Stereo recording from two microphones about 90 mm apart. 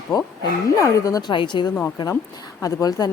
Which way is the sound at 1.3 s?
60° left (ahead or behind).